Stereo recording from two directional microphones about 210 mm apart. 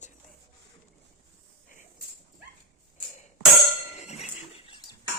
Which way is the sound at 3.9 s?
30° left (ahead or behind).